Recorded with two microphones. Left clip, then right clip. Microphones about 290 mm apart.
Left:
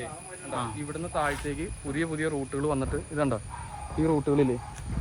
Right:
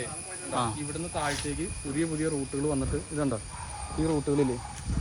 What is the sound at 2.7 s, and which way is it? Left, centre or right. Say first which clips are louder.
Speech: left 1 dB; left.